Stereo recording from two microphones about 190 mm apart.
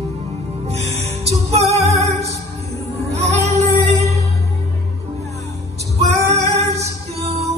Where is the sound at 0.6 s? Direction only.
35° right (ahead or behind).